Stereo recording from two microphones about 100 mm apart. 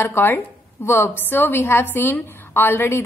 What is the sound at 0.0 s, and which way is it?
A woman's voice, 20° left (ahead or behind).